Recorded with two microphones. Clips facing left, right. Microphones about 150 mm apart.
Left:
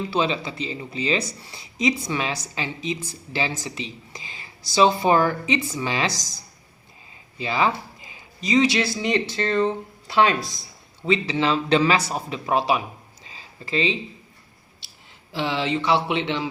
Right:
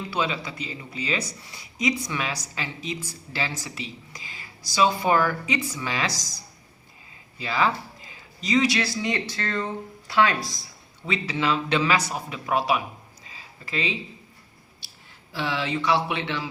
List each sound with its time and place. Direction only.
0.1 s speech: 25° left (ahead or behind)
7.3 s speech: 20° left (ahead or behind)
13.2 s a sound: 25° left (ahead or behind)
15.3 s speech: 20° left (ahead or behind)